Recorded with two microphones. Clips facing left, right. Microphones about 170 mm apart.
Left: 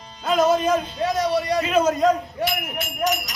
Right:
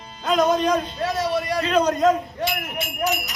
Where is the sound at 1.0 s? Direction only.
20° left (ahead or behind).